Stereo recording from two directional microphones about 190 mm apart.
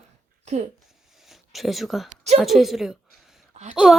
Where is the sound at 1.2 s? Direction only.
Centre (ahead or behind).